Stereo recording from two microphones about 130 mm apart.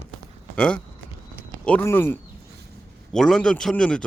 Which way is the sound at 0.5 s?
10° left (ahead or behind).